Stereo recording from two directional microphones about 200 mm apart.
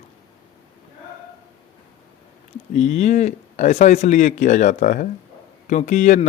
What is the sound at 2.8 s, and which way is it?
A man's voice, 35° left (ahead or behind).